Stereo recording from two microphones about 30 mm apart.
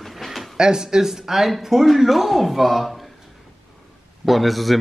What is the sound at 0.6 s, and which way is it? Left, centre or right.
Speech, right.